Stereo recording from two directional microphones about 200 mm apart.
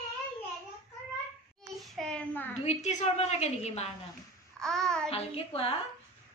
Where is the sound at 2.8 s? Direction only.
35° left (ahead or behind).